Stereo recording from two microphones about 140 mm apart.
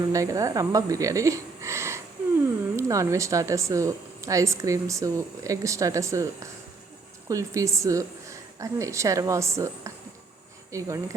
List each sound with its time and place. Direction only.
0.0 s a woman's voice: 25° right (ahead or behind)